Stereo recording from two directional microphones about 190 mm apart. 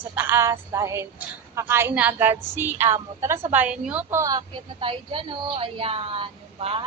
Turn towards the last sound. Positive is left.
turn(degrees=-30)  # may be behind; listen again after turning